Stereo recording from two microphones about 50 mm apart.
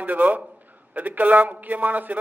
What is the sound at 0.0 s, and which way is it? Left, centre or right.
Speech, right.